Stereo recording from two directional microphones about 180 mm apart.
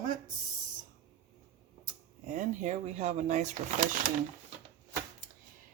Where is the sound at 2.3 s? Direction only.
45° right (ahead or behind).